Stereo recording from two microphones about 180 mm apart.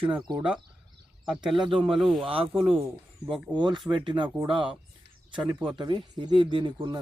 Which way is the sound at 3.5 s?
25° right (ahead or behind).